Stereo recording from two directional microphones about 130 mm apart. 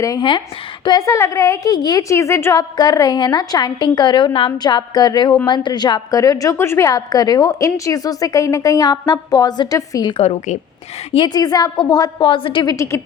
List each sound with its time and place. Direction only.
0.0 s a woman's voice: 35° left (ahead or behind)
10.2 s a woman's voice: 65° left (ahead or behind)
11.1 s a woman's voice: 35° left (ahead or behind)
12.6 s a woman's voice: 25° left (ahead or behind)